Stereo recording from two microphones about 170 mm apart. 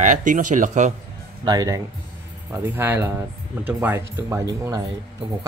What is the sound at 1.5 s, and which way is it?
Speech, 20° right (ahead or behind).